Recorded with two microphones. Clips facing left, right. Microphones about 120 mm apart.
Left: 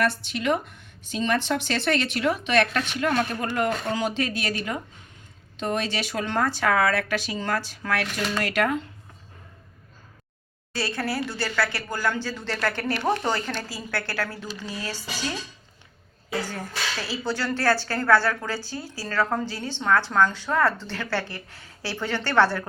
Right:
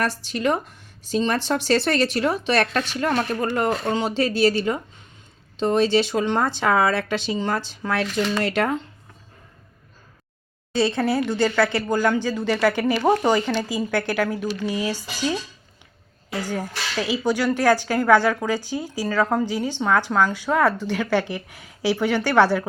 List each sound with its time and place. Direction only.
0.0 s a woman's voice: 35° right (ahead or behind)
10.8 s a woman's voice: 20° right (ahead or behind)
16.4 s a woman's voice: 15° right (ahead or behind)